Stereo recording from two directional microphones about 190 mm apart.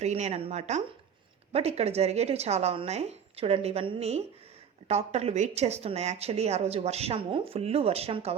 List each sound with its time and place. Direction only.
0.0 s speech: 35° right (ahead or behind)